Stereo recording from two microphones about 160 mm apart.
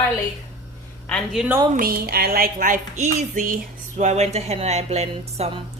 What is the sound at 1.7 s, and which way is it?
A woman's voice, 70° right (ahead or behind).